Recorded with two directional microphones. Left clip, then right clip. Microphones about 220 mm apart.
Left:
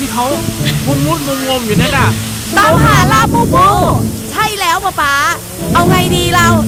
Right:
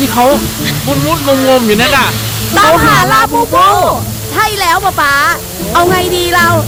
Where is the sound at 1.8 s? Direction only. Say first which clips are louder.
Right 4 dB; 50° right (ahead or behind).